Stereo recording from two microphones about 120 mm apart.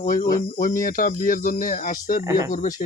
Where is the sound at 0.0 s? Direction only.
90° left.